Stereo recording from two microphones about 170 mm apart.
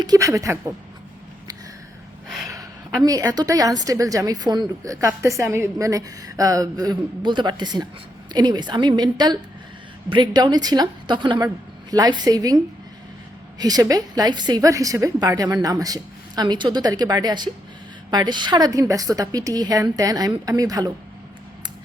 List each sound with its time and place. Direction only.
0.0 s a woman's voice: 20° right (ahead or behind)
3.0 s a woman's voice: 20° right (ahead or behind)
13.6 s a woman's voice: 20° right (ahead or behind)